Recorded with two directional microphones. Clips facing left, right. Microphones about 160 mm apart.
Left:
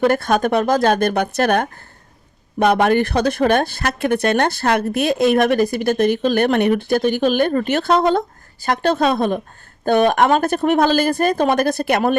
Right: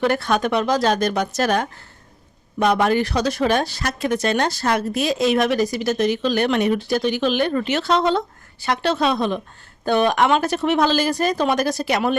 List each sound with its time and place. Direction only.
0.0 s a woman's voice: 50° left (ahead or behind)